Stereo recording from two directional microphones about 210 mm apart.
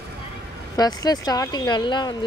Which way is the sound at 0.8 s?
20° left (ahead or behind).